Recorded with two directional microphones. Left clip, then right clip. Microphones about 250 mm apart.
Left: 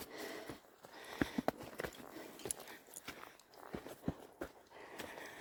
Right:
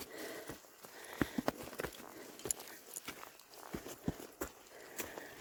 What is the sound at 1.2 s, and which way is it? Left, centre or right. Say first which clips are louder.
Clip-clop: right 1 dB; right.